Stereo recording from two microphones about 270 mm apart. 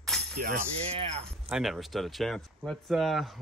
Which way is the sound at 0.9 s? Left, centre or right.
Centre.